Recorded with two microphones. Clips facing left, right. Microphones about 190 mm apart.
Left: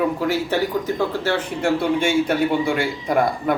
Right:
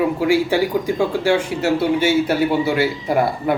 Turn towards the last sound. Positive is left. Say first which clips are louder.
# right 1 dB
turn(degrees=-5)  # may be behind; listen again after turning